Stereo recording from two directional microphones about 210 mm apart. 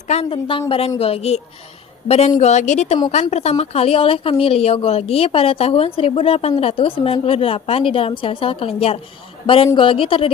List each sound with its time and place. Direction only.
0.1 s a woman's voice: 30° left (ahead or behind)